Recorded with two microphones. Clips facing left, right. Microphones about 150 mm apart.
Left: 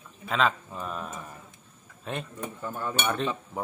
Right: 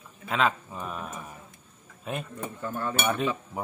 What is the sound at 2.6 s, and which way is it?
Speech, 10° left (ahead or behind).